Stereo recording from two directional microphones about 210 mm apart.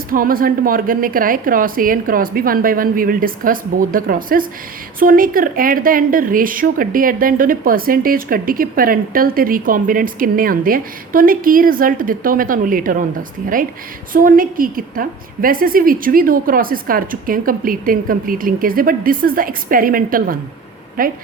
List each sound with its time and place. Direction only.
0.1 s a woman's voice: 45° right (ahead or behind)